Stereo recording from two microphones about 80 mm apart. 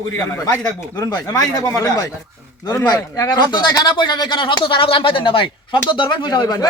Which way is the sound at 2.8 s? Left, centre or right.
Left.